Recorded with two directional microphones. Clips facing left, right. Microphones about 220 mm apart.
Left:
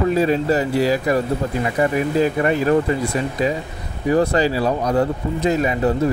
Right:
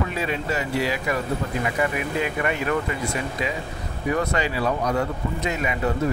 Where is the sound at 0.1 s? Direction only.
40° left (ahead or behind).